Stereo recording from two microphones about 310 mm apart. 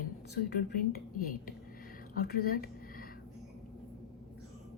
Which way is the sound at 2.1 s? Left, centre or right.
Left.